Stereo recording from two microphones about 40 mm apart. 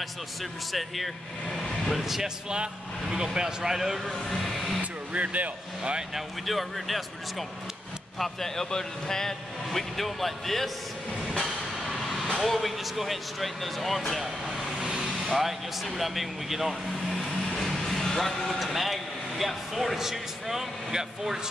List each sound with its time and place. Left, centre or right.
0.0 s speech: centre
2.5 s speech: centre
4.4 s a sound: centre
5.1 s speech: right
6.1 s speech: centre
14.8 s vehicle: right
15.2 s speech: centre
17.5 s speech: centre